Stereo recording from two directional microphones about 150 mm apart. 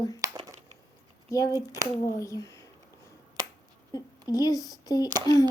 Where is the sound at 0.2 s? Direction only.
25° right (ahead or behind).